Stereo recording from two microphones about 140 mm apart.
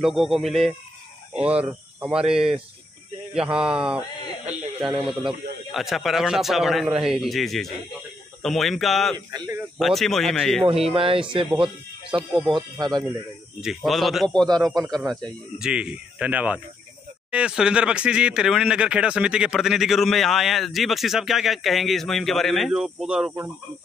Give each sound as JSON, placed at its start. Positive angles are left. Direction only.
{"t": 0.0, "sound": "speech", "side_deg": 0}
{"t": 10.9, "sound": "speech", "side_deg": -40}
{"t": 12.3, "sound": "speech", "side_deg": 0}
{"t": 12.7, "sound": "speech", "side_deg": -30}
{"t": 13.6, "sound": "speech", "side_deg": 0}